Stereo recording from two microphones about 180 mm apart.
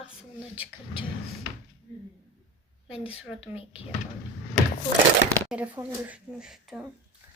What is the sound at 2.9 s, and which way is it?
Speech, 30° left (ahead or behind).